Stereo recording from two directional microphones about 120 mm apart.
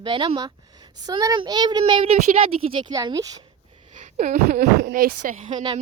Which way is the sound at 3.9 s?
90° right.